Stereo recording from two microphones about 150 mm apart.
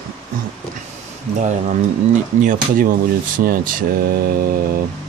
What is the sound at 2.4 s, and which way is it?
Speech, 60° right (ahead or behind).